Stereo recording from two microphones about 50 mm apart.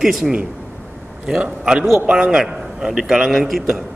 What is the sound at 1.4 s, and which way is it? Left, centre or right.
A man's voice, centre.